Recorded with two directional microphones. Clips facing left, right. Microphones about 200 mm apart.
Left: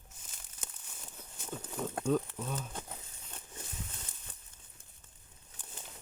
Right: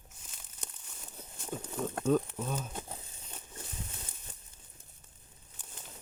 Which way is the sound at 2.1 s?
55° right (ahead or behind).